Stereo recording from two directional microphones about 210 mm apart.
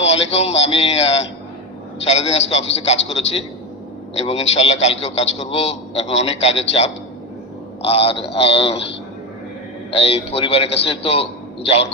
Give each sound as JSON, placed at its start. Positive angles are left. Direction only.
{"t": 0.1, "sound": "a man's voice", "side_deg": 30}
{"t": 9.9, "sound": "a man's voice", "side_deg": 30}